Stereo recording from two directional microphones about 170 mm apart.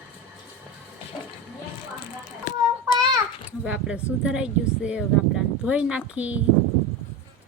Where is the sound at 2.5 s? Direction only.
45° left (ahead or behind).